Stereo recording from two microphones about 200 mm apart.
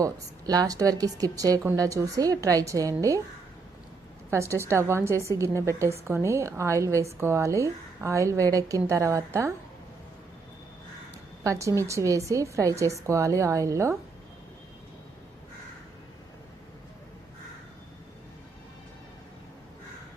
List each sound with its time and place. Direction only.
0.0 s a woman's voice: 20° right (ahead or behind)
4.3 s a woman's voice: 15° right (ahead or behind)
11.4 s a woman's voice: 15° right (ahead or behind)